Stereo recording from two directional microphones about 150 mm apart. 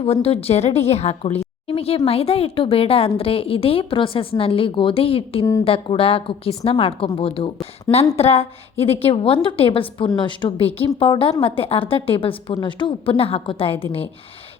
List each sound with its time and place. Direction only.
0.0 s a woman's voice: 40° left (ahead or behind)
1.6 s a sound: 40° left (ahead or behind)
2.0 s a woman's voice: 40° left (ahead or behind)